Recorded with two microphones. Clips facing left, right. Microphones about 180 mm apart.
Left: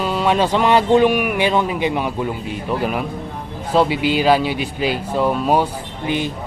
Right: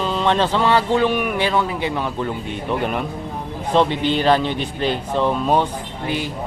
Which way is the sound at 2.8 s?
5° left (ahead or behind).